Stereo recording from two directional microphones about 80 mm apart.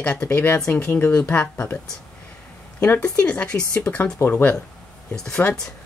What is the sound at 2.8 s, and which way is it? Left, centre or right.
Speech, left.